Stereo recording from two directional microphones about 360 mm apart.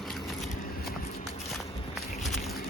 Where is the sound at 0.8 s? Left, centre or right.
Left.